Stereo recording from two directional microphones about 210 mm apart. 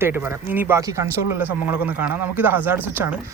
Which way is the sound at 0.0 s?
10° right (ahead or behind).